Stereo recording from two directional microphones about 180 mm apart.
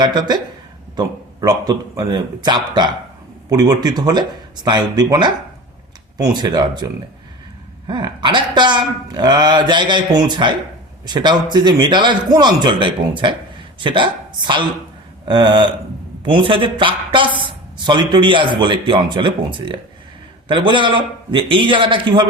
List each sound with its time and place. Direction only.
0.0 s speech: 25° right (ahead or behind)